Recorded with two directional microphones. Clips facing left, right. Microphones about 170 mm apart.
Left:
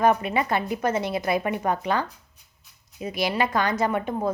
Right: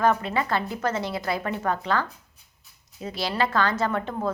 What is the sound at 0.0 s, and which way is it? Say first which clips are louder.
A woman's voice: left 2 dB; 15° left (ahead or behind).